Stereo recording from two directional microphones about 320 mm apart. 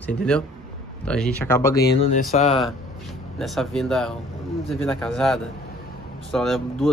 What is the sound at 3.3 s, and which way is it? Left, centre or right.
A man's voice, centre.